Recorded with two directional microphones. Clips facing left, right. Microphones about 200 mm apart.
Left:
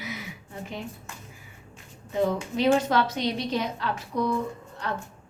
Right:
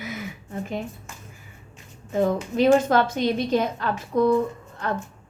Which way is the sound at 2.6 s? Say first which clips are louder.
Right 4 dB; 50° right (ahead or behind).